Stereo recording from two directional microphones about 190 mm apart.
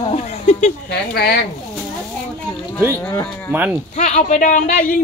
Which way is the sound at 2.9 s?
10° left (ahead or behind).